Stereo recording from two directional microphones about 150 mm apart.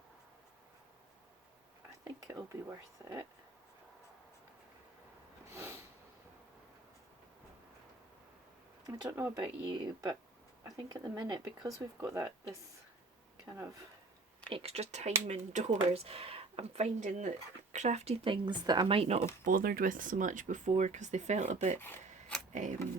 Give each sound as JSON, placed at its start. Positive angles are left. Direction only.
{"t": 2.0, "sound": "speech", "side_deg": -20}
{"t": 5.5, "sound": "snort", "side_deg": -15}
{"t": 8.9, "sound": "speech", "side_deg": -15}
{"t": 9.4, "sound": "speech", "side_deg": -30}
{"t": 14.5, "sound": "speech", "side_deg": -40}
{"t": 19.5, "sound": "speech", "side_deg": -70}
{"t": 21.8, "sound": "speech", "side_deg": 15}